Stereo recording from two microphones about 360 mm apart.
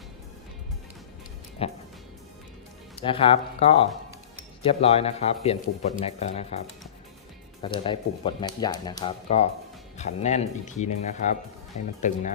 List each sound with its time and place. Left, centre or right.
1.6 s speech: centre
3.0 s speech: centre
7.6 s speech: centre